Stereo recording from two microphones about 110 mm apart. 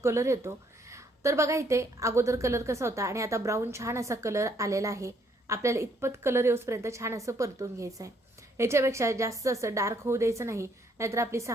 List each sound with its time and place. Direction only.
0.0 s a woman's voice: 25° right (ahead or behind)